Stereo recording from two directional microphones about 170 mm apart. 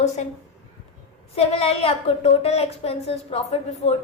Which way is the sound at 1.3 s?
35° left (ahead or behind).